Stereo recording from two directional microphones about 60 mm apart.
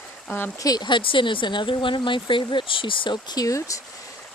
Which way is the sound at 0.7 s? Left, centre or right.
Left.